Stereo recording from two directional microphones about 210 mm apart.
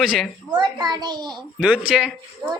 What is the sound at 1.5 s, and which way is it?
Speech, 5° right (ahead or behind).